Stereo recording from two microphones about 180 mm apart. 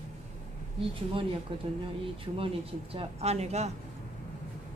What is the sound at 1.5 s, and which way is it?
Speech, 30° right (ahead or behind).